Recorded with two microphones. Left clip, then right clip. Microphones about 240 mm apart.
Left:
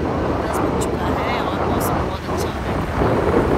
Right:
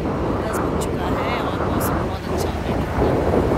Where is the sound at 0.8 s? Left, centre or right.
Centre.